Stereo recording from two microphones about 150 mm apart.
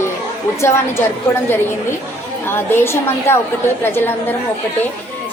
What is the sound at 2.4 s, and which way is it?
Speech, 15° left (ahead or behind).